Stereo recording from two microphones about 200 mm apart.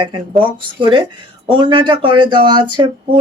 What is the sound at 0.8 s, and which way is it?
Speech, 20° right (ahead or behind).